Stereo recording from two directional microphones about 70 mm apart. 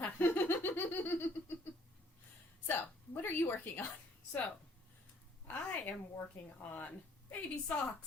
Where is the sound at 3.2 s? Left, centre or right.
Left.